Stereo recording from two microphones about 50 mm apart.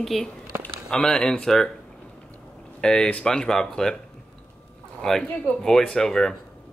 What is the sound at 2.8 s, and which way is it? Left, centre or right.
Speech, left.